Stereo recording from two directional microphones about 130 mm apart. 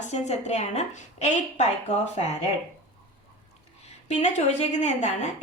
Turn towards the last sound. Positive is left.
turn(degrees=60)  # may be behind; listen again after turning